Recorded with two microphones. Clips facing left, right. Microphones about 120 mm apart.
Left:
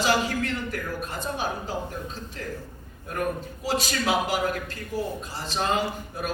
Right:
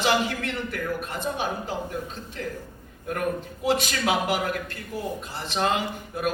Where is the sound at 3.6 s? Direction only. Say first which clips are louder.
Right 2 dB; 55° right (ahead or behind).